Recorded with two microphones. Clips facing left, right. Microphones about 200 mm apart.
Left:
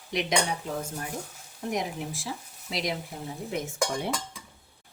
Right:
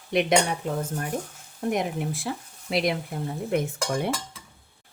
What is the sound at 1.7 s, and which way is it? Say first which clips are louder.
Speech: right 5 dB; 55° right (ahead or behind).